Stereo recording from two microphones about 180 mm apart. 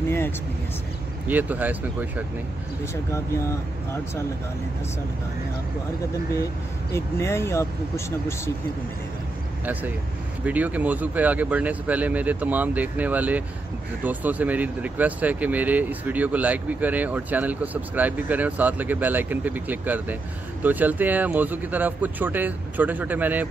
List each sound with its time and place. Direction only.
1.2 s speech: 10° right (ahead or behind)
3.1 s speech: 15° left (ahead or behind)
6.9 s speech: 15° left (ahead or behind)
10.4 s speech: 10° right (ahead or behind)